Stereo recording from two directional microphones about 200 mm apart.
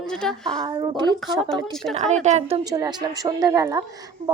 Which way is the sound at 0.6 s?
20° right (ahead or behind).